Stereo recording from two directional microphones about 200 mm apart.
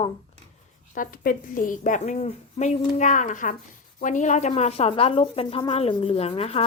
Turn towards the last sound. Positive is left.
turn(degrees=30)  # may be behind; listen again after turning